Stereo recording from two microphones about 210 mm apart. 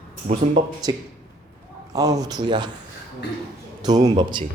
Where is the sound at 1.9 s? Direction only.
15° right (ahead or behind).